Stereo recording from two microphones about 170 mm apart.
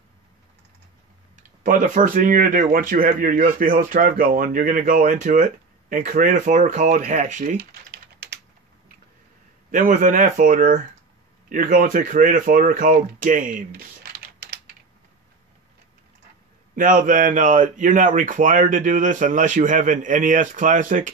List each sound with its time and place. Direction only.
1.3 s speech: 50° right (ahead or behind)
7.5 s typing: 75° right (ahead or behind)
9.7 s speech: 55° right (ahead or behind)
14.1 s typing: 65° right (ahead or behind)
16.7 s speech: 55° right (ahead or behind)